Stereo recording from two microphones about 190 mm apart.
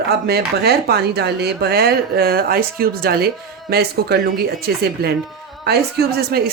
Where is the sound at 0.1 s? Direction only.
55° right (ahead or behind).